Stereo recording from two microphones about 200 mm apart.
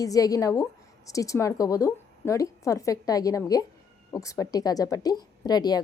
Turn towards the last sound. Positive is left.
turn(degrees=20)  # may be behind; listen again after turning